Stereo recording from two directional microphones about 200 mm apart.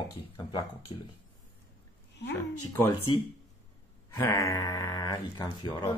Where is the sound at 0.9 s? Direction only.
25° left (ahead or behind).